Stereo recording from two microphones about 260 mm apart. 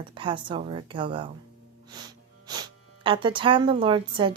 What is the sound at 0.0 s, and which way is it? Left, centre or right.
A woman's voice, centre.